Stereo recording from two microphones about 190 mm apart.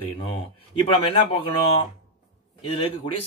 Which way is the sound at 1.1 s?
30° left (ahead or behind).